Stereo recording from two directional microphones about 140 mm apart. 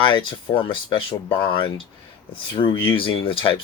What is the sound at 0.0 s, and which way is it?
Speech, 35° left (ahead or behind).